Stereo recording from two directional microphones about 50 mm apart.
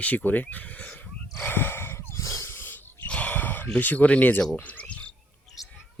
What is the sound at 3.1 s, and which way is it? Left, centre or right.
Gasp, left.